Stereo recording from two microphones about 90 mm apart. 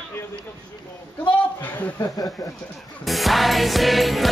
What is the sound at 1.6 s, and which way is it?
Speech, 20° left (ahead or behind).